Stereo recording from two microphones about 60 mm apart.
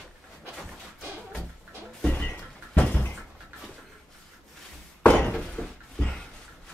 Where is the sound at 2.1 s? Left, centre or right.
Left.